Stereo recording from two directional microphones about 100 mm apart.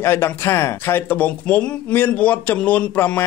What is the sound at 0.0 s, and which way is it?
A man's voice, 25° left (ahead or behind).